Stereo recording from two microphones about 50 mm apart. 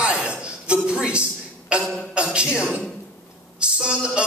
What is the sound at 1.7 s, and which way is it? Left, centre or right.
Music, centre.